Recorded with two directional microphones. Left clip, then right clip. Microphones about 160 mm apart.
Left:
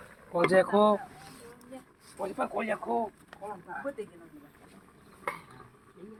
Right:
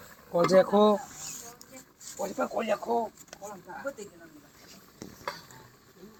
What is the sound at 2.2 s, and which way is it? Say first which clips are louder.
Speech: right 1 dB; 45° right (ahead or behind).